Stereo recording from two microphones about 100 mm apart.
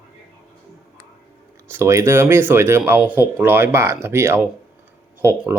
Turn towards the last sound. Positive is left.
turn(degrees=-25)  # may be behind; listen again after turning